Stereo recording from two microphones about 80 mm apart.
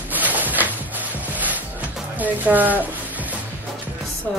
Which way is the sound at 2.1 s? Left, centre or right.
Right.